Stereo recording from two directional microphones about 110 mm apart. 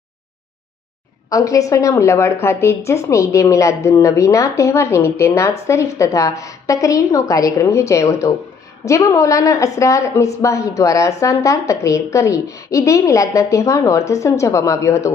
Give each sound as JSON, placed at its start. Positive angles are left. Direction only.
{"t": 1.3, "sound": "a woman's voice", "side_deg": 30}